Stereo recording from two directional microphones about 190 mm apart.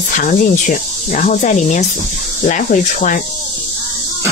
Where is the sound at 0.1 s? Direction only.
45° left (ahead or behind).